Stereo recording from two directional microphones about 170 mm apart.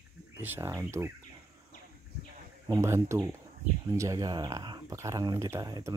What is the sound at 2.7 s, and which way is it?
Speech, 15° right (ahead or behind).